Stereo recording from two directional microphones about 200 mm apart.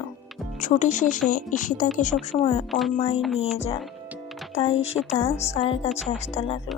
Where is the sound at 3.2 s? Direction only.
Centre (ahead or behind).